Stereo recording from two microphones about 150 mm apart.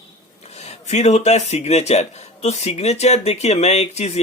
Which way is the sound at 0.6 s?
50° left (ahead or behind).